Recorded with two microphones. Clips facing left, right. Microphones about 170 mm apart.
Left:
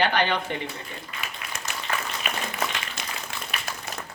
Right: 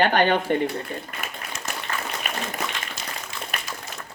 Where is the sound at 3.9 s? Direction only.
65° left (ahead or behind).